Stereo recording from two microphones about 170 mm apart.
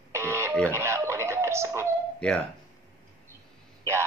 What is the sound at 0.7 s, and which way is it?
Wail, 15° right (ahead or behind).